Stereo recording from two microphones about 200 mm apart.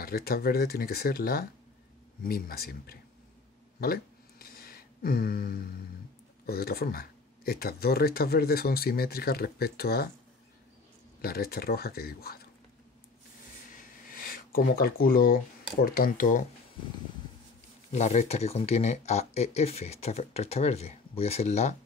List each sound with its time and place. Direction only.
0.0 s speech: 50° left (ahead or behind)
3.8 s a sound: 50° left (ahead or behind)
6.4 s speech: 50° left (ahead or behind)
11.1 s speech: 50° left (ahead or behind)
13.7 s a sound: 45° left (ahead or behind)
15.8 s speech: 45° left (ahead or behind)
17.9 s speech: 35° left (ahead or behind)